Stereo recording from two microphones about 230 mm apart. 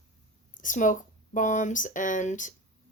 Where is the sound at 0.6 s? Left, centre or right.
Left.